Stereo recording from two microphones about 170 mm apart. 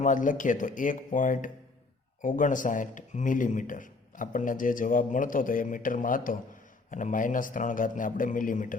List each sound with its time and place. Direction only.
0.0 s speech: 50° left (ahead or behind)